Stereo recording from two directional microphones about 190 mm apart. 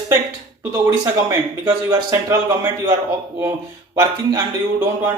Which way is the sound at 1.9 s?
15° right (ahead or behind).